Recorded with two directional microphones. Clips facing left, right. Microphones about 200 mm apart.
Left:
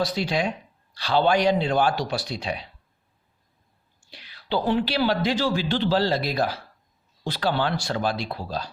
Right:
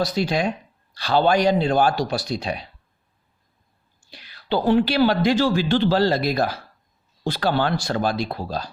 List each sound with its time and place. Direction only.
0.0 s speech: 45° right (ahead or behind)
4.1 s speech: 45° right (ahead or behind)